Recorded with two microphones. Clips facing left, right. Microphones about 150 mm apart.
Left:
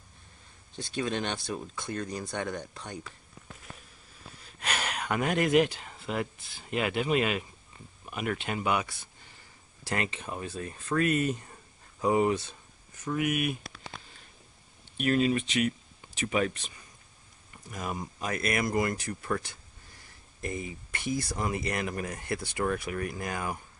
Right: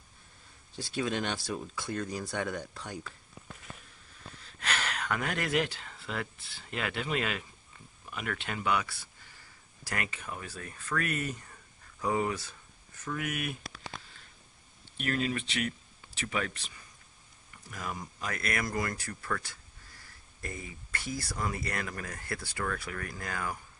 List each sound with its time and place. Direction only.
0.7 s speech: 5° right (ahead or behind)
4.6 s speech: 15° left (ahead or behind)
15.0 s speech: 20° left (ahead or behind)